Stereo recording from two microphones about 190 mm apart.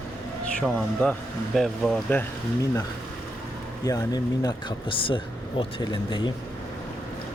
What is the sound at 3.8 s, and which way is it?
Speech, 20° left (ahead or behind).